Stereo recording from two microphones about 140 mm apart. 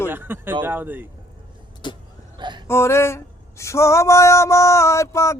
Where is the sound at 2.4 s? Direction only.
35° right (ahead or behind).